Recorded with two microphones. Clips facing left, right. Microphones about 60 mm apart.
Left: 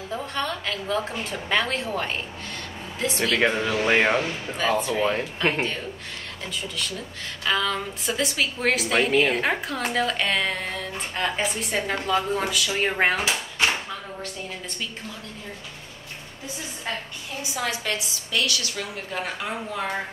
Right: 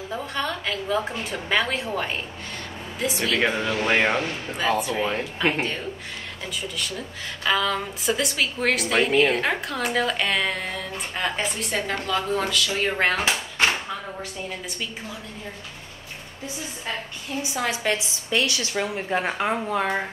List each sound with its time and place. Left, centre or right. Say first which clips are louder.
0.1 s a woman's voice: even; centre
7.0 s a woman's voice: right 2 dB; centre
17.4 s a woman's voice: right 2 dB; right